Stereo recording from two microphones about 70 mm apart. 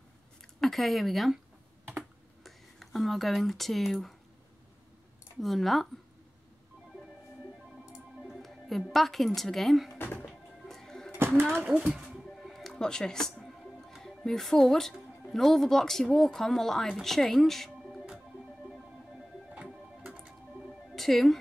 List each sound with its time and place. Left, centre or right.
0.4 s speech: centre
2.4 s speech: centre
5.4 s speech: centre
8.2 s speech: centre
9.9 s music: left
10.2 s music: centre
11.1 s a sound: right
11.4 s speech: centre
11.7 s speech: centre
12.1 s music: centre
17.0 s speech: centre
19.7 s music: centre
20.9 s a woman's voice: centre